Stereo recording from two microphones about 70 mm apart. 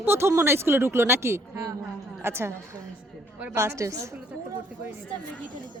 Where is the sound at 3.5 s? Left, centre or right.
Right.